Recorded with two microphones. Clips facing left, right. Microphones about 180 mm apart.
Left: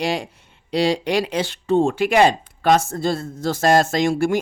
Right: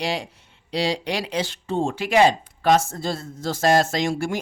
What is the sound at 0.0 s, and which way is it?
Speech, 50° left (ahead or behind).